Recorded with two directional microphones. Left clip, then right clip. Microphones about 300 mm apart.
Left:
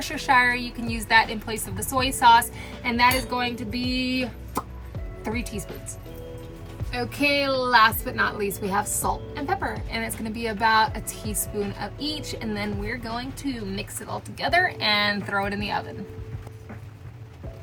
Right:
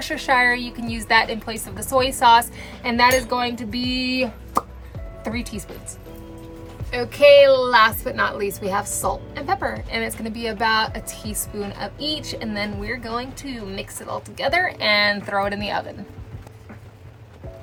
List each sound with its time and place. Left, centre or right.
0.0 s a woman's voice: centre
6.9 s a woman's voice: centre